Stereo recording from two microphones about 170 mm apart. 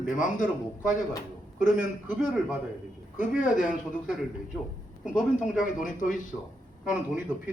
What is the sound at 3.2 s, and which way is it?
Speech, 50° left (ahead or behind).